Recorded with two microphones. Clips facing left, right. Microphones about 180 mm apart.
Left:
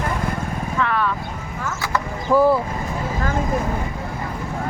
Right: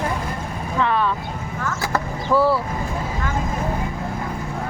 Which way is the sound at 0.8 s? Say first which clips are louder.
Right 2 dB; 25° right (ahead or behind).